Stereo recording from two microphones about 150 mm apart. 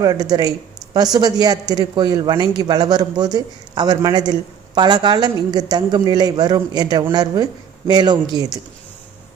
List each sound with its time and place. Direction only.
0.0 s a man's voice: 25° right (ahead or behind)